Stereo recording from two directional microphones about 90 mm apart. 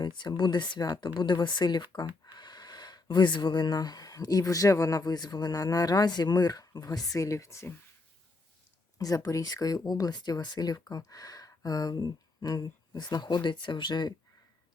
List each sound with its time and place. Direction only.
0.0 s speech: 60° left (ahead or behind); by 7.7 s 35° left (ahead or behind)
9.0 s speech: 40° left (ahead or behind); by 14.1 s 55° left (ahead or behind)